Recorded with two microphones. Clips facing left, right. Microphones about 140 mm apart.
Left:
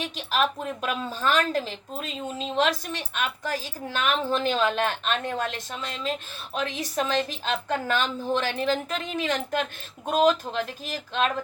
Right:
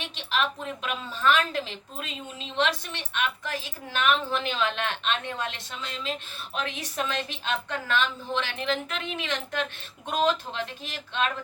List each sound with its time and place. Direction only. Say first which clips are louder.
0.0 s a woman's voice: left 3 dB; 40° left (ahead or behind)